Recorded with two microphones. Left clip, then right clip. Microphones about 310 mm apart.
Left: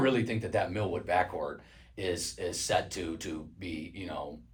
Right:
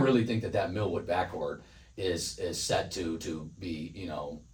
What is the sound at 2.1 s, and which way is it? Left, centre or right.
Speech, centre.